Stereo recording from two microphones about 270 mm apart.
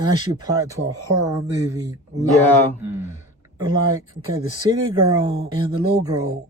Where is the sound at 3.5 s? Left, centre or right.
Centre.